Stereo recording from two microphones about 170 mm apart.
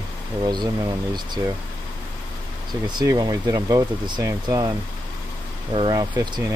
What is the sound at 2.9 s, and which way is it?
Speech, 25° right (ahead or behind).